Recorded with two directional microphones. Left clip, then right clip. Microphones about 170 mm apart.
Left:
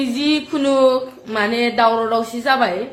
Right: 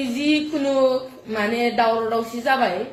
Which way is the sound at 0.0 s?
20° left (ahead or behind).